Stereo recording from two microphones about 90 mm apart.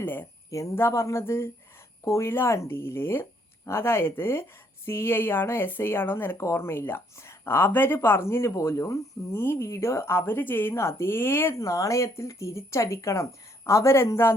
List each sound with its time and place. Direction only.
0.0 s speech: 25° left (ahead or behind)
11.6 s speech: 35° left (ahead or behind)